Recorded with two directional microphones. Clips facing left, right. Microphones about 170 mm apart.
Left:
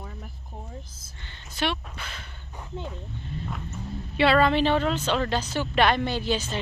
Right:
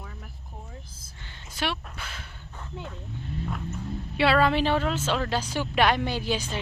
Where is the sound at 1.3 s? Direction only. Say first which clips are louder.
Left 2 dB; 5° right (ahead or behind).